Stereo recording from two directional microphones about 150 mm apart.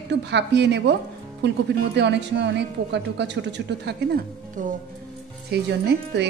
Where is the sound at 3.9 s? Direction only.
90° right.